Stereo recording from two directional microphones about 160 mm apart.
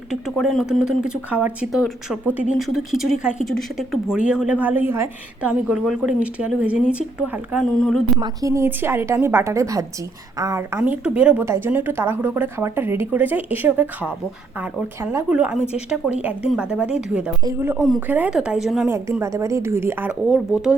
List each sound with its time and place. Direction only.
0.1 s a woman's voice: centre (ahead or behind)
8.2 s a woman's voice: 20° right (ahead or behind)
10.8 s a woman's voice: 10° right (ahead or behind)
15.3 s a woman's voice: 5° right (ahead or behind)
18.9 s a woman's voice: 15° right (ahead or behind)